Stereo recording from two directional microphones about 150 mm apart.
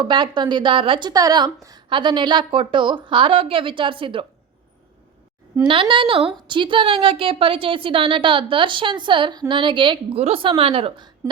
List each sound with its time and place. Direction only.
0.0 s a woman's voice: 30° right (ahead or behind)
5.6 s a woman's voice: 35° right (ahead or behind)